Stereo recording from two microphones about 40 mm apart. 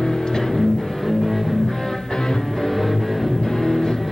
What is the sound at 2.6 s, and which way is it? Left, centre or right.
Music, centre.